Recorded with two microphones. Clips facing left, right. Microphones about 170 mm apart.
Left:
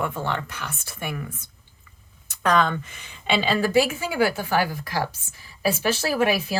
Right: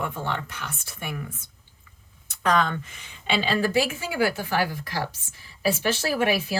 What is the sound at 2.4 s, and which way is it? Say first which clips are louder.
Speech: left 2 dB; 60° left (ahead or behind).